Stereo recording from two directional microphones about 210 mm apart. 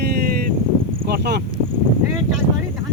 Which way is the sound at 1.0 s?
50° right (ahead or behind).